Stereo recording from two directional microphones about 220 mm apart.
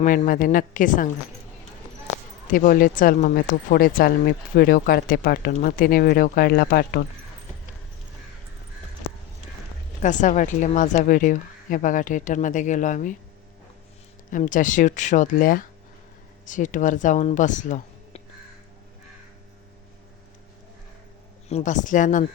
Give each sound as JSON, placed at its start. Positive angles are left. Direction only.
{"t": 0.0, "sound": "speech", "side_deg": 35}
{"t": 2.5, "sound": "speech", "side_deg": 40}
{"t": 10.0, "sound": "speech", "side_deg": 35}
{"t": 14.3, "sound": "speech", "side_deg": 35}
{"t": 21.5, "sound": "speech", "side_deg": 35}